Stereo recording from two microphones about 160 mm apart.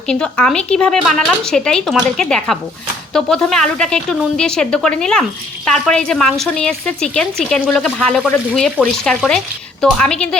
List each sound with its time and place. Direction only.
0.1 s a woman's voice: 5° left (ahead or behind)